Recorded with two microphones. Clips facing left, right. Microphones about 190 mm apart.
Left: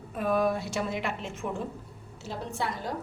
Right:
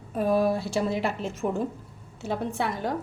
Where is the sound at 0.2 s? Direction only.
30° right (ahead or behind).